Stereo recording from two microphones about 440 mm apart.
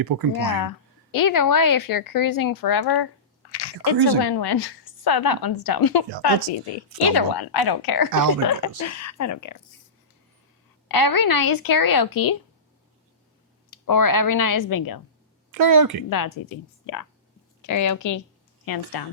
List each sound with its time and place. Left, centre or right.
0.0 s a woman's voice: right
1.1 s a woman's voice: left
10.8 s speech: left
13.7 s speech: left
15.5 s a woman's voice: right
16.0 s speech: left
18.6 s speech: left